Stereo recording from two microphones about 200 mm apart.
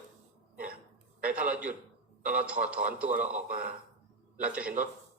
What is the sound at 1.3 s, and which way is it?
A man's voice, 5° right (ahead or behind).